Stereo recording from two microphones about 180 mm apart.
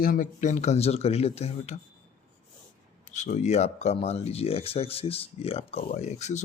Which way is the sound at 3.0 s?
40° left (ahead or behind).